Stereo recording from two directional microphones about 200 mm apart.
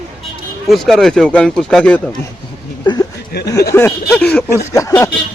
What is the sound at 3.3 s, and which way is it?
Speech, 55° left (ahead or behind).